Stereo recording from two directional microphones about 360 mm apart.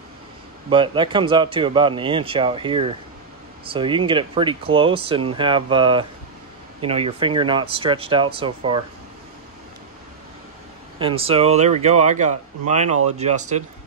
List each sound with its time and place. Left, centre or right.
0.7 s speech: centre
11.0 s speech: centre